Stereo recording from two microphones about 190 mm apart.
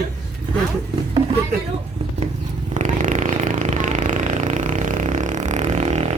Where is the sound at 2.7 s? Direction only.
40° right (ahead or behind).